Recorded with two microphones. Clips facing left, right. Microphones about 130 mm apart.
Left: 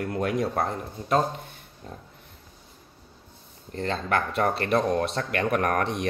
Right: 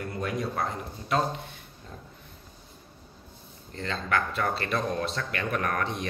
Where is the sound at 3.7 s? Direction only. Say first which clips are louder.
Left 3 dB; 50° left (ahead or behind).